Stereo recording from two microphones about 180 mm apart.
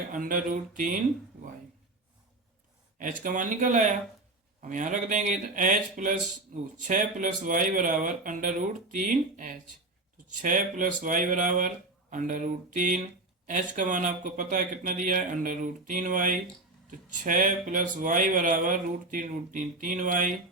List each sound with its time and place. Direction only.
0.1 s speech: 50° right (ahead or behind)
3.0 s speech: 45° right (ahead or behind)